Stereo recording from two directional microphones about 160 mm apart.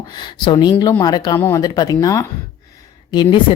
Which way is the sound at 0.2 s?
25° left (ahead or behind).